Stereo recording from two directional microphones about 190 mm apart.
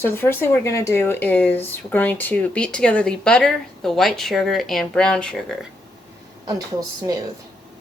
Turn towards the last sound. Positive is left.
turn(degrees=-20)  # may be behind; listen again after turning